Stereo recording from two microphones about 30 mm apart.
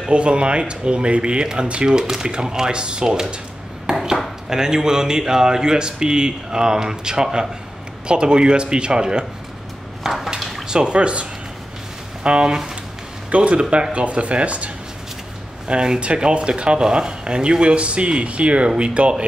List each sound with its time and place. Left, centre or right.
0.1 s speech: right
1.9 s speech: right
3.9 s ping: centre
4.5 s speech: right
10.0 s a sound: centre
10.7 s speech: right
13.3 s speech: right
13.6 s speech: right
13.9 s speech: right
15.7 s speech: right